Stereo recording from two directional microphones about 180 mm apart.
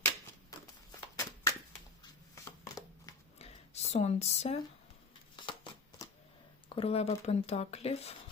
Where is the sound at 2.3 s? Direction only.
20° left (ahead or behind).